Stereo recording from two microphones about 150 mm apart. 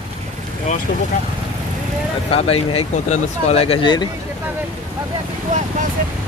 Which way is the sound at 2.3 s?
40° left (ahead or behind).